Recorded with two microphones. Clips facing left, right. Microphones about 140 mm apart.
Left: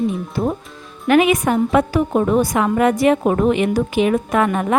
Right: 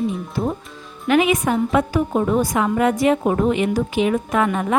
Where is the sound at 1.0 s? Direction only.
55° left (ahead or behind).